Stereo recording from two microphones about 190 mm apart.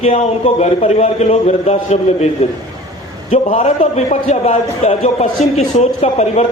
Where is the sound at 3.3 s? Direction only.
40° left (ahead or behind).